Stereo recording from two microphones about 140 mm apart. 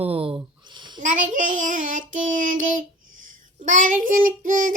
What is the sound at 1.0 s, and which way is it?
Child singing, 65° right (ahead or behind).